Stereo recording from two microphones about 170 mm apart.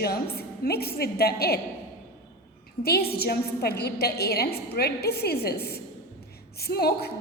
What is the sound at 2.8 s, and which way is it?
A woman's voice, 65° left (ahead or behind).